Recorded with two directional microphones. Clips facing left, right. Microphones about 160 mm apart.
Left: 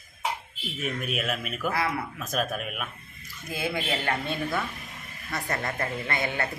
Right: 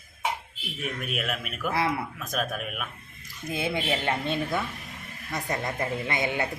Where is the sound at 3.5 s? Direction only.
20° right (ahead or behind).